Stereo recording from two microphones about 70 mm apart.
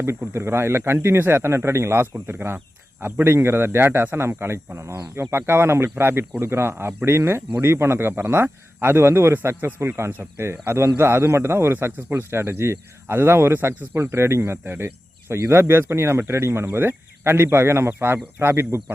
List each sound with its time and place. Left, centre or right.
0.3 s speech: right